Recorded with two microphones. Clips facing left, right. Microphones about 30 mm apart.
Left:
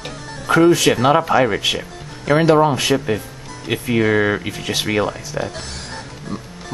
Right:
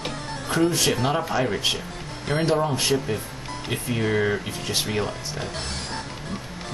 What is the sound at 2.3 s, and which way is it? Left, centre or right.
Speech, left.